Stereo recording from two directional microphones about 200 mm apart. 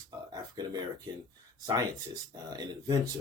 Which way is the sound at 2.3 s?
20° right (ahead or behind).